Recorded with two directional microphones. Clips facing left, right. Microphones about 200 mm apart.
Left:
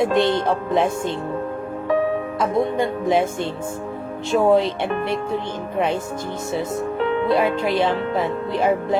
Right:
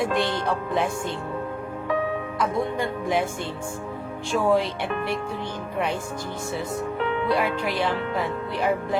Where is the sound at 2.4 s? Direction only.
25° left (ahead or behind).